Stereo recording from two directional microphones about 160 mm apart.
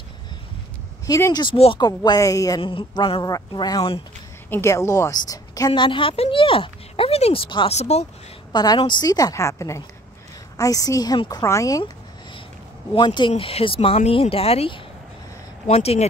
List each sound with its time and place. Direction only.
1.0 s a woman's voice: 20° left (ahead or behind); by 8.1 s 40° left (ahead or behind)
8.5 s speech: 25° left (ahead or behind)
12.9 s a woman's voice: 30° left (ahead or behind)